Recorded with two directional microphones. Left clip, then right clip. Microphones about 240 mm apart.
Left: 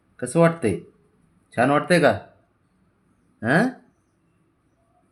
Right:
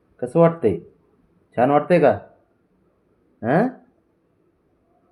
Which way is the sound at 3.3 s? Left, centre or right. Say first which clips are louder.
Right 1 dB; centre.